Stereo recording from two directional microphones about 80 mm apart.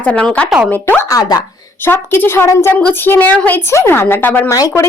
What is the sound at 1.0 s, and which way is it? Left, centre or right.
Speech, left.